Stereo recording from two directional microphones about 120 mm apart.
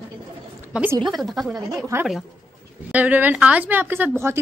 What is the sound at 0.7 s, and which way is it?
Speech, 10° right (ahead or behind).